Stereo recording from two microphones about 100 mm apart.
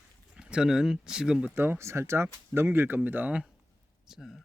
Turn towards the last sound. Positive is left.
turn(degrees=0)  # may be behind; listen again after turning